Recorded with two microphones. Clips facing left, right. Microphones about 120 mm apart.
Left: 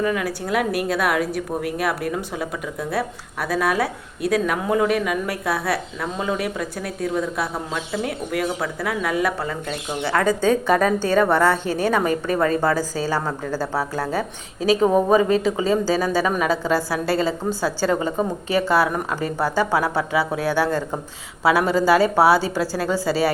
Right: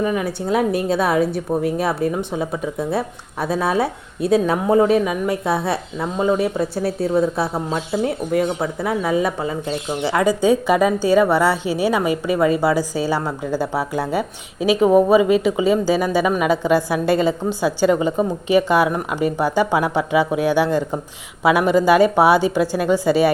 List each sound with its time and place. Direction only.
0.0 s a woman's voice: 20° right (ahead or behind)